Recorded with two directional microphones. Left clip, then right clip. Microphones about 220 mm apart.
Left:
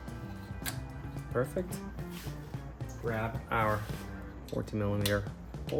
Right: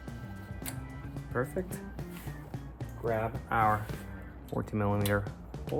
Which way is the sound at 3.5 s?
15° right (ahead or behind).